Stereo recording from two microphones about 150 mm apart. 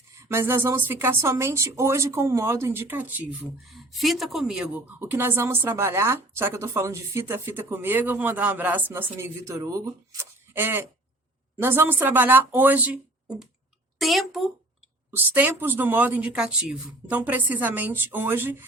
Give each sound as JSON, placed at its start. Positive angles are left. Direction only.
{"t": 0.2, "sound": "a woman's voice", "side_deg": -15}
{"t": 3.7, "sound": "a woman's voice", "side_deg": 0}
{"t": 15.1, "sound": "a woman's voice", "side_deg": -10}